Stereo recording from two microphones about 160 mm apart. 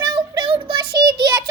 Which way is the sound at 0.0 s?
25° right (ahead or behind).